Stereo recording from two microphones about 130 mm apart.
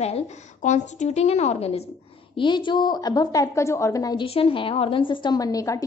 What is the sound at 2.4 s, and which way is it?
A woman's voice, 40° left (ahead or behind).